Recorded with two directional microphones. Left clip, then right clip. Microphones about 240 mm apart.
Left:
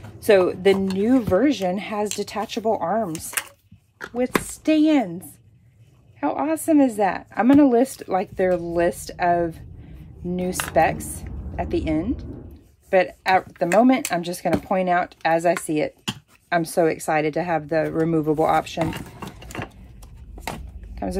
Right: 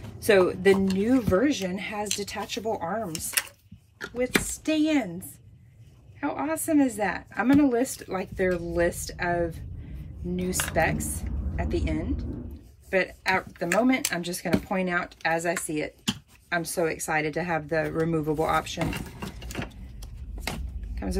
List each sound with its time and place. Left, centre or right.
0.2 s speech: centre
6.2 s speech: centre
20.9 s a sound: centre